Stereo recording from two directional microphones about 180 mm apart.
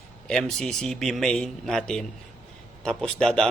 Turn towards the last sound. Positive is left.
turn(degrees=5)  # may be behind; listen again after turning